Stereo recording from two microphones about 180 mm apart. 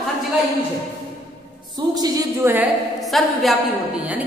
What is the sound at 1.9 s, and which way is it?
Speech, 20° right (ahead or behind).